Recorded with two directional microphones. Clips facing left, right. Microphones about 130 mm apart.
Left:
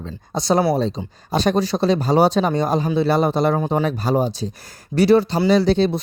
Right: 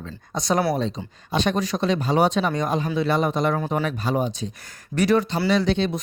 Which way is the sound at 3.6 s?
20° left (ahead or behind).